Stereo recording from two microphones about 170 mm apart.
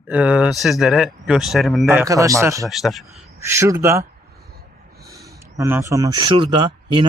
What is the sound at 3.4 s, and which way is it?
Speech, 15° right (ahead or behind).